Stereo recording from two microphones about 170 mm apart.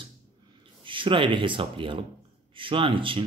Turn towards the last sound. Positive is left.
turn(degrees=-30)  # may be behind; listen again after turning